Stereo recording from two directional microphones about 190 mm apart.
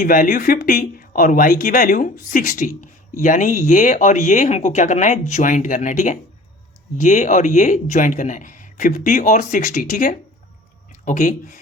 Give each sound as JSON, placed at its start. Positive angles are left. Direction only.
{"t": 0.0, "sound": "speech", "side_deg": 50}
{"t": 11.0, "sound": "speech", "side_deg": 45}